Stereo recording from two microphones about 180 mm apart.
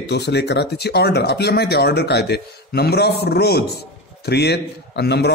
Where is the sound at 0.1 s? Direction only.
70° left (ahead or behind).